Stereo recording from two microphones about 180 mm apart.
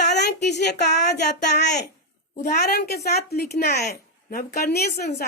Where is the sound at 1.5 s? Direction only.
70° left (ahead or behind).